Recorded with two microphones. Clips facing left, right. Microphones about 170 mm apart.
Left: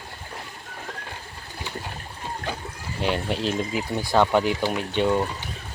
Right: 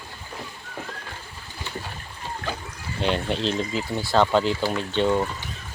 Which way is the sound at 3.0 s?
5° left (ahead or behind).